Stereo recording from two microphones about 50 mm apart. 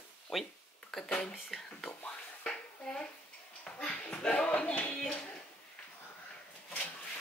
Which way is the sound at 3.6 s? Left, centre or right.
Left.